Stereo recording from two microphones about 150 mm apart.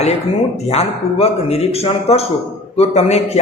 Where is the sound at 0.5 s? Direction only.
45° left (ahead or behind).